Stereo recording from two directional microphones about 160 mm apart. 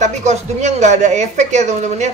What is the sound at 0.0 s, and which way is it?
Speech, 45° right (ahead or behind).